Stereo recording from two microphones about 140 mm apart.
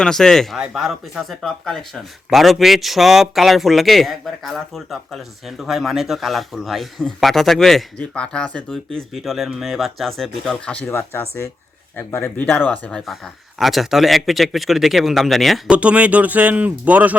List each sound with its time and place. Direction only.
0.0 s speech: 5° left (ahead or behind)
13.1 s speech: centre (ahead or behind)